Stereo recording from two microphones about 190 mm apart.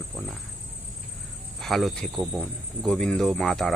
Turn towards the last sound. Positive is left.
turn(degrees=0)  # may be behind; listen again after turning